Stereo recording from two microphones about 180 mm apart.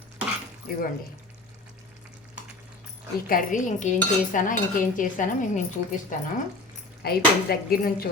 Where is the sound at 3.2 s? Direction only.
50° left (ahead or behind).